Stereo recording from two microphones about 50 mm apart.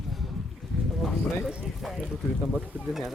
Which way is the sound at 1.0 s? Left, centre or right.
Centre.